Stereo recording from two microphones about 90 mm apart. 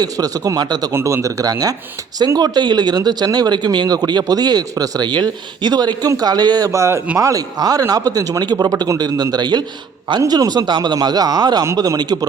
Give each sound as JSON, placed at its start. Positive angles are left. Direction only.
{"t": 0.0, "sound": "speech", "side_deg": -45}
{"t": 0.9, "sound": "speech", "side_deg": -35}
{"t": 6.7, "sound": "speech", "side_deg": -35}